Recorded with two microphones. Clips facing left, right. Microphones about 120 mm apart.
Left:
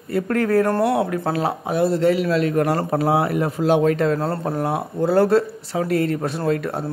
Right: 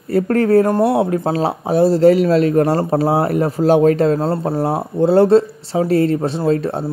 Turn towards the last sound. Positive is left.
turn(degrees=-30)  # may be behind; listen again after turning